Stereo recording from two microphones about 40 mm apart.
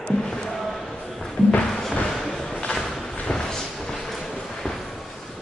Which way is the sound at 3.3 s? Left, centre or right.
Centre.